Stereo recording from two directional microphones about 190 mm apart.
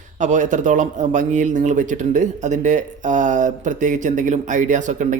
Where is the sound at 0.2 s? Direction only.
40° right (ahead or behind).